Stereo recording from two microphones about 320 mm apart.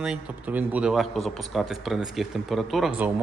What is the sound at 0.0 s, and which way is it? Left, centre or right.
Speech, centre.